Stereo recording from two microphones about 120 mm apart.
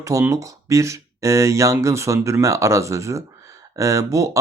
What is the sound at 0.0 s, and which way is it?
Speech, 25° right (ahead or behind).